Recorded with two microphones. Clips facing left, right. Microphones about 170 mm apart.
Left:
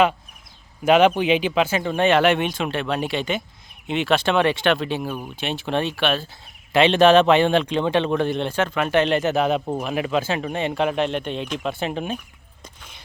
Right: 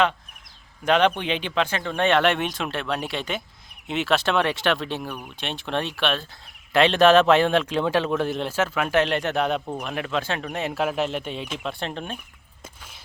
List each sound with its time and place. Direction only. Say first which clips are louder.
0.9 s speech: left 5 dB; 10° left (ahead or behind)
5.0 s speech: left 5 dB; 30° left (ahead or behind)
5.4 s speech: left 4 dB; 5° left (ahead or behind)
12.6 s a sound: even; 5° right (ahead or behind)